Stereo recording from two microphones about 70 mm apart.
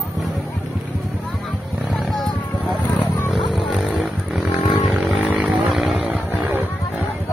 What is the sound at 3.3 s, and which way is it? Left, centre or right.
Vehicle, centre.